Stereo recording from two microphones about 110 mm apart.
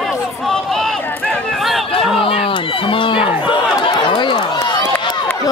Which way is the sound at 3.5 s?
50° left (ahead or behind).